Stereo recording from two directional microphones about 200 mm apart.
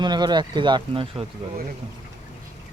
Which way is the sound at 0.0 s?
20° right (ahead or behind).